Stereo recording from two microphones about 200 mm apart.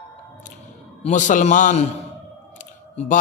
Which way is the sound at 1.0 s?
40° left (ahead or behind).